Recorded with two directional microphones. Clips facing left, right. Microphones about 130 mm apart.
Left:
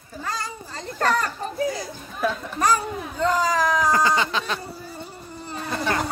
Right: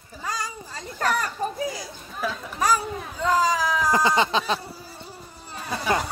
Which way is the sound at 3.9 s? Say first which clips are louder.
Even; 20° right (ahead or behind).